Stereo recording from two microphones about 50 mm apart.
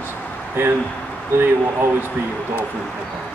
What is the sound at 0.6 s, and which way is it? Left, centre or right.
Speech, right.